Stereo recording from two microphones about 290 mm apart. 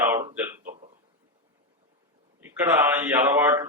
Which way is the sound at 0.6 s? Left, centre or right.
Right.